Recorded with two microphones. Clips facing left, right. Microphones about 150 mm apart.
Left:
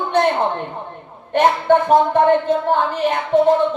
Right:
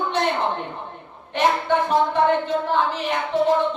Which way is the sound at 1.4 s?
50° left (ahead or behind).